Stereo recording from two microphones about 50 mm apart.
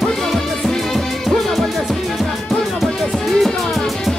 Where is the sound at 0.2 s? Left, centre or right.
Centre.